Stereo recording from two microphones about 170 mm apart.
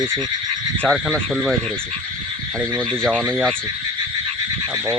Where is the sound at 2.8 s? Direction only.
5° left (ahead or behind).